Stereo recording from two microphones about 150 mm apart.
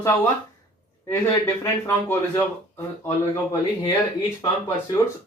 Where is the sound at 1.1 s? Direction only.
15° left (ahead or behind).